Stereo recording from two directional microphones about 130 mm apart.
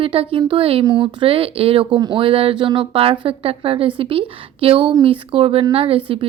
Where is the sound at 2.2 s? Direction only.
45° right (ahead or behind).